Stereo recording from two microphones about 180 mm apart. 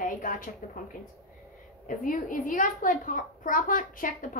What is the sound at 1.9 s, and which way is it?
A woman's voice, 50° left (ahead or behind).